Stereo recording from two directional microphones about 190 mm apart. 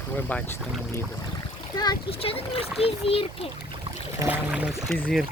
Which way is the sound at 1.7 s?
20° left (ahead or behind).